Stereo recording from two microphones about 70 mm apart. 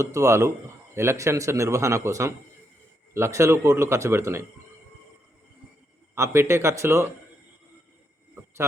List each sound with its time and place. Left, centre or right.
0.0 s a man's voice: right
6.1 s a man's voice: right